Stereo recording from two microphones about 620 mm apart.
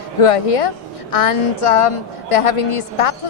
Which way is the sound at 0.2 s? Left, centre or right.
Left.